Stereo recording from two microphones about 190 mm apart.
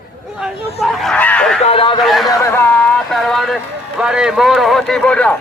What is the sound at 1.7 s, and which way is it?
Speech, 30° left (ahead or behind).